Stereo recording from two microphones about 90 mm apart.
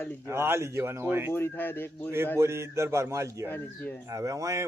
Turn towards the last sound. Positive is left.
turn(degrees=-35)  # may be behind; listen again after turning